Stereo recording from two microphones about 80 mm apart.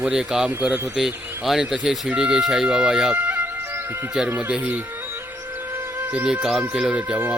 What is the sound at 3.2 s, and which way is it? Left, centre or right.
Music, right.